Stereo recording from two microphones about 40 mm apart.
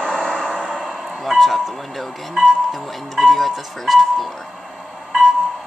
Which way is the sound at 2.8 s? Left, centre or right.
Centre.